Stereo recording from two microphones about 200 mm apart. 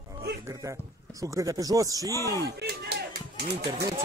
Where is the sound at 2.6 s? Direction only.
55° right (ahead or behind).